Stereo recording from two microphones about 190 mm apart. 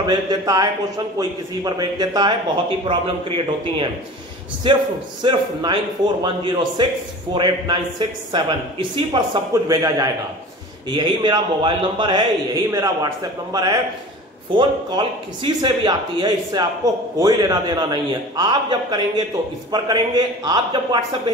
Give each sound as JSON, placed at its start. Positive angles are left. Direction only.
{"t": 0.0, "sound": "speech", "side_deg": -20}
{"t": 9.5, "sound": "a man's voice", "side_deg": -15}